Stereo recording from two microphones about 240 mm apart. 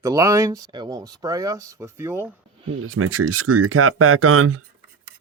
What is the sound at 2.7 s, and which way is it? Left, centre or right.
Speech, right.